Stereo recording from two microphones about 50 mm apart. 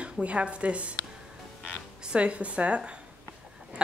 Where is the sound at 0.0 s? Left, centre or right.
Right.